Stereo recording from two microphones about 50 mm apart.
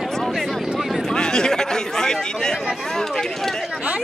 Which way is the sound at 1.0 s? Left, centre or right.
Centre.